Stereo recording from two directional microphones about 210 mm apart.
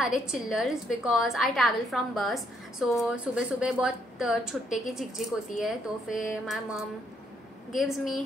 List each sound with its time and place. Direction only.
0.0 s a woman's voice: 5° right (ahead or behind)